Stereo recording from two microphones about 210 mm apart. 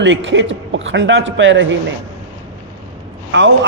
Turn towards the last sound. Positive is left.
turn(degrees=-60)  # may be behind; listen again after turning